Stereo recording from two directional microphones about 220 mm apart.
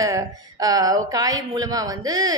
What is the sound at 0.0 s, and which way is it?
A woman's voice, 15° right (ahead or behind).